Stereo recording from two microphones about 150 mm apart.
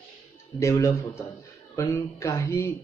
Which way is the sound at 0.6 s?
20° left (ahead or behind).